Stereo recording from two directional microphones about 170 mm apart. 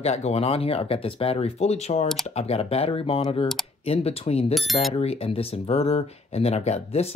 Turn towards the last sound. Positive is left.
turn(degrees=40)  # may be behind; listen again after turning